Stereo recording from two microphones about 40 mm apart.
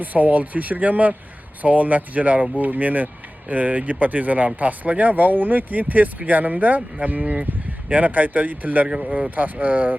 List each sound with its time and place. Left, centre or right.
0.0 s speech: right
8.9 s speech: right
9.3 s speech: right